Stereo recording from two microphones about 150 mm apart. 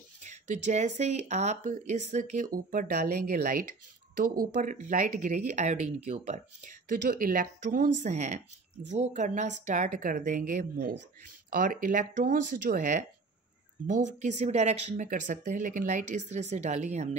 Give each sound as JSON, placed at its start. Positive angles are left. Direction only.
{"t": 0.3, "sound": "a woman's voice", "side_deg": -50}
{"t": 6.9, "sound": "a woman's voice", "side_deg": -70}
{"t": 11.5, "sound": "a woman's voice", "side_deg": -65}
{"t": 14.2, "sound": "speech", "side_deg": -50}
{"t": 15.0, "sound": "a woman's voice", "side_deg": -60}